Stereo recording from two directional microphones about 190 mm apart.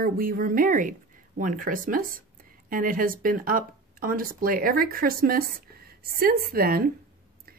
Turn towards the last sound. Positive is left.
turn(degrees=-50)  # may be behind; listen again after turning